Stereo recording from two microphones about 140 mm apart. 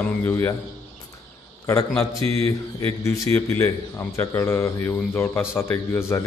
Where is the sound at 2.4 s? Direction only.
20° left (ahead or behind).